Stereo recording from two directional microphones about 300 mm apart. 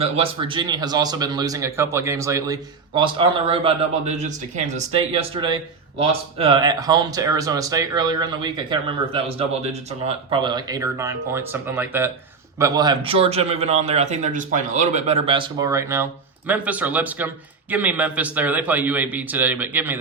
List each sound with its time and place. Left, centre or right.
0.0 s a man's voice: centre